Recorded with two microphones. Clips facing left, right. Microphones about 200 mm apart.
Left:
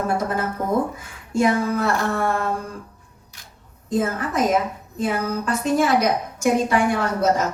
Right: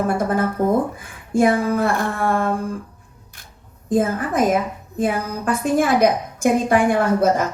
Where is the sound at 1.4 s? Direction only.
55° right (ahead or behind).